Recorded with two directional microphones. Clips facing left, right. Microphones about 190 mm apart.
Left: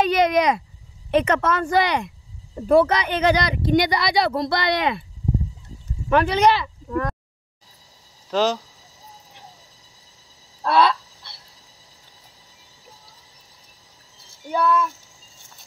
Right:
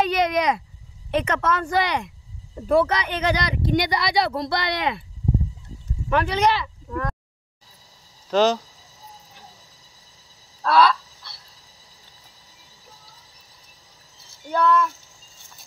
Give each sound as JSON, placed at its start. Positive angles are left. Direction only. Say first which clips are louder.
{"t": 0.0, "sound": "a sound", "louder": "left 3 dB", "side_deg": 55}
{"t": 1.1, "sound": "speech", "louder": "left 3 dB", "side_deg": 50}
{"t": 6.0, "sound": "speech", "louder": "left 3 dB", "side_deg": 65}
{"t": 8.3, "sound": "speech", "louder": "right 2 dB", "side_deg": 0}
{"t": 10.6, "sound": "fowl", "louder": "even", "side_deg": 20}
{"t": 11.3, "sound": "a sound", "louder": "even", "side_deg": 25}
{"t": 14.6, "sound": "speech", "louder": "right 1 dB", "side_deg": 0}